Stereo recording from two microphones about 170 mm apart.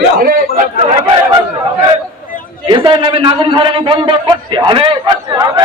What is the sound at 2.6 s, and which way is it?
A man's voice, 30° right (ahead or behind).